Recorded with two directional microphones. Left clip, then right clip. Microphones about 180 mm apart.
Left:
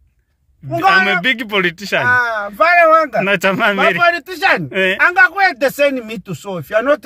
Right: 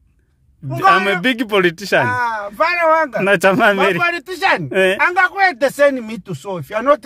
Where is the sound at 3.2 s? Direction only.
45° right (ahead or behind).